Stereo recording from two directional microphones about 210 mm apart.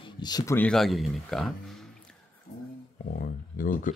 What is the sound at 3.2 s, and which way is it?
Speech, 40° left (ahead or behind).